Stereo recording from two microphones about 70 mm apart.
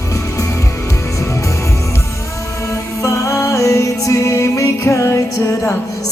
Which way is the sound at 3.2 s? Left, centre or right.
Left.